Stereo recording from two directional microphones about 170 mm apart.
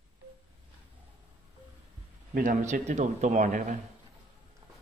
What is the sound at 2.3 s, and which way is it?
A man's voice, 50° right (ahead or behind).